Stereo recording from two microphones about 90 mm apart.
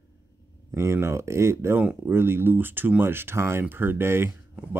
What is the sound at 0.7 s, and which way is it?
Speech, 30° right (ahead or behind).